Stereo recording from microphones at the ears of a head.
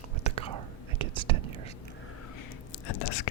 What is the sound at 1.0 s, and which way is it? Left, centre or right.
Whispering, right.